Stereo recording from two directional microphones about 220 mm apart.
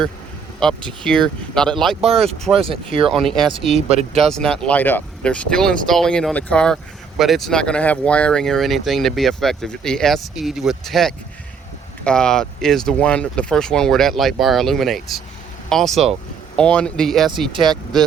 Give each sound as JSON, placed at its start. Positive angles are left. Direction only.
{"t": 0.9, "sound": "speech", "side_deg": 5}
{"t": 2.0, "sound": "speech", "side_deg": -25}
{"t": 3.1, "sound": "speech", "side_deg": 0}
{"t": 3.8, "sound": "speech", "side_deg": -25}
{"t": 4.2, "sound": "speech", "side_deg": 0}